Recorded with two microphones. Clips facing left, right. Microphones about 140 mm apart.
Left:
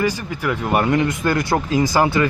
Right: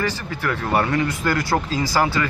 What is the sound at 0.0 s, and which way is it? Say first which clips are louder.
Speech: left 3 dB; 15° left (ahead or behind).